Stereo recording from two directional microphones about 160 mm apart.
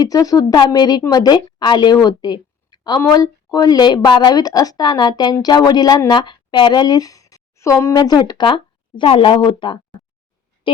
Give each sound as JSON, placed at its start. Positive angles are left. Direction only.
{"t": 0.0, "sound": "a woman's voice", "side_deg": 25}